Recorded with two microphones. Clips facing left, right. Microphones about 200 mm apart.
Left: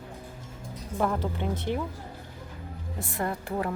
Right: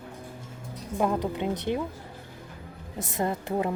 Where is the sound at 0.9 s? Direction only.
15° right (ahead or behind).